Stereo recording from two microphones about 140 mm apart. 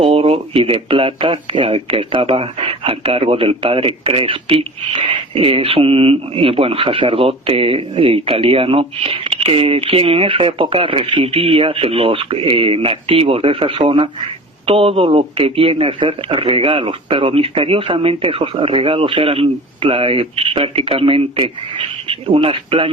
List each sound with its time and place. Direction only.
0.0 s speech: 40° right (ahead or behind)